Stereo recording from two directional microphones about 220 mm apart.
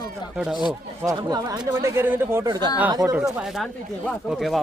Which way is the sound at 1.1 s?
15° right (ahead or behind).